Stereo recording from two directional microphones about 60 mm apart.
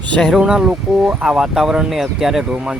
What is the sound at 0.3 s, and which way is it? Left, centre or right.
Speech, centre.